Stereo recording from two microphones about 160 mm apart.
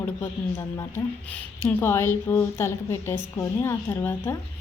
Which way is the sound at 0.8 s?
15° left (ahead or behind).